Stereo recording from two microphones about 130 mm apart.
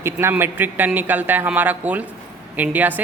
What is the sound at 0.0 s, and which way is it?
Speech, 20° right (ahead or behind).